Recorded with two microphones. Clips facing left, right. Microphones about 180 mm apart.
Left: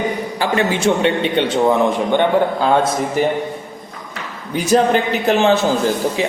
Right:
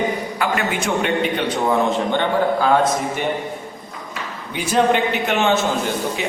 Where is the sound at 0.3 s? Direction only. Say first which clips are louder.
Left 6 dB; 30° left (ahead or behind).